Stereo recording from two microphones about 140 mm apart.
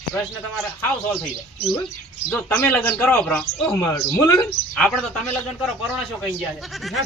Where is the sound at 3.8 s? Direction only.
25° left (ahead or behind).